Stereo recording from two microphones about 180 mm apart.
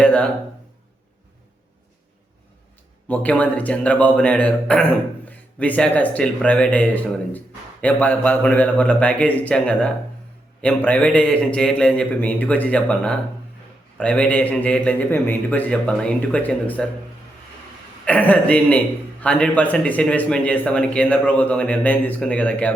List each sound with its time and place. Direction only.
0.0 s a sound: 5° left (ahead or behind)
3.1 s a man's voice: 5° left (ahead or behind)
18.0 s a man's voice: 10° left (ahead or behind)